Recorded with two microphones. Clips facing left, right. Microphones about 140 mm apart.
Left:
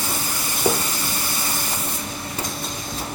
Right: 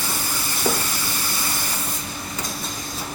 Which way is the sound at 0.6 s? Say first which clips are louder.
Left 3 dB; 15° left (ahead or behind).